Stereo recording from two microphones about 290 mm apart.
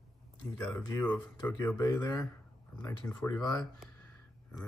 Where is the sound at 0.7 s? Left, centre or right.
Centre.